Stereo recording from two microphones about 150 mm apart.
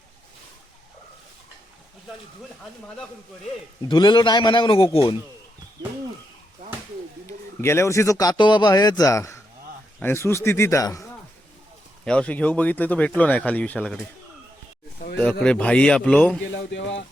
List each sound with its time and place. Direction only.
3.8 s a man's voice: 30° left (ahead or behind)
7.3 s a man's voice: 20° left (ahead or behind)
12.0 s speech: 5° left (ahead or behind)
15.2 s speech: 5° left (ahead or behind)